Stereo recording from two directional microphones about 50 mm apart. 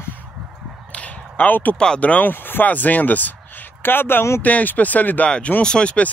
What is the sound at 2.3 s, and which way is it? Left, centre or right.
Speech, left.